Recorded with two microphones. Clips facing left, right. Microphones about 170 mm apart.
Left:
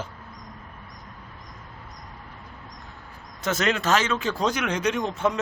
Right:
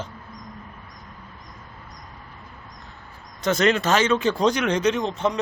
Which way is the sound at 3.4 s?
5° left (ahead or behind).